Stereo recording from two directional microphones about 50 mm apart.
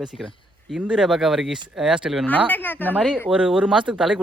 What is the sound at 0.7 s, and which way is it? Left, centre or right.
Speech, centre.